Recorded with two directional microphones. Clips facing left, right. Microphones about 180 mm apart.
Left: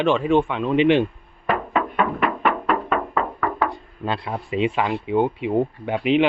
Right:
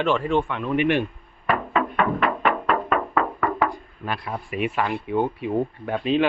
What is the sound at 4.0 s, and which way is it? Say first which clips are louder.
Speech: left 4 dB; 25° left (ahead or behind).